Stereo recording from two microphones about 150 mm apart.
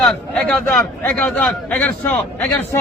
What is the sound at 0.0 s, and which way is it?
A man's voice, 5° left (ahead or behind).